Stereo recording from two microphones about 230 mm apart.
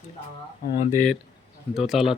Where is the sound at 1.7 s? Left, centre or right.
Centre.